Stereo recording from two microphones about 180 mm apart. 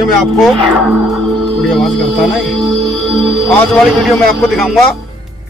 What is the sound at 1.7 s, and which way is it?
A man's voice, centre (ahead or behind).